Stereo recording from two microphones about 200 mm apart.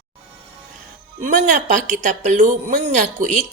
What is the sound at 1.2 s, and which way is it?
A woman's voice, 40° right (ahead or behind).